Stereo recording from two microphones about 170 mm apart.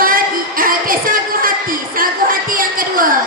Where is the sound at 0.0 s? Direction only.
55° right (ahead or behind).